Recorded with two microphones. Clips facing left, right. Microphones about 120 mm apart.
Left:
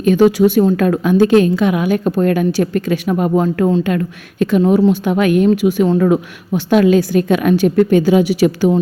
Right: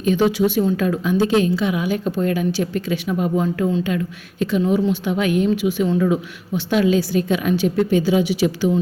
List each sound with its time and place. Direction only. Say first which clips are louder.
0.0 s a woman's voice: left 6 dB; 50° left (ahead or behind)
4.6 s speech: left 7 dB; 40° left (ahead or behind)
5.5 s a woman's voice: left 6 dB; 45° left (ahead or behind)